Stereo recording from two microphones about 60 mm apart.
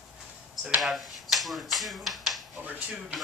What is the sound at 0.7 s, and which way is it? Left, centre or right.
Speech, centre.